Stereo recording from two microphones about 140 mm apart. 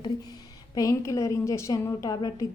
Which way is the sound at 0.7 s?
25° left (ahead or behind).